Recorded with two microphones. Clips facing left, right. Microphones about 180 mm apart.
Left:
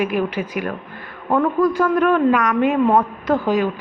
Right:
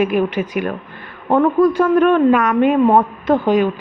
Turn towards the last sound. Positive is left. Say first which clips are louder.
# right 4 dB
turn(degrees=-25)  # may be behind; listen again after turning